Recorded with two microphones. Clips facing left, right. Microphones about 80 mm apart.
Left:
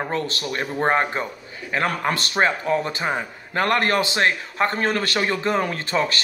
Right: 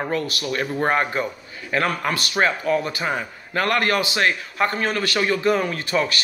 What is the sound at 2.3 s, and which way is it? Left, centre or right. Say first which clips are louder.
A man's voice: right 1 dB; left.